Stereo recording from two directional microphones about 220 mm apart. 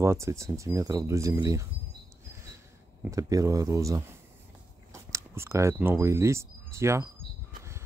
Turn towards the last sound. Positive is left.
turn(degrees=-10)  # may be behind; listen again after turning